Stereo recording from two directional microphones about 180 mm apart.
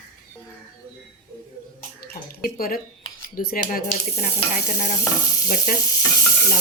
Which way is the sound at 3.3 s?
55° left (ahead or behind).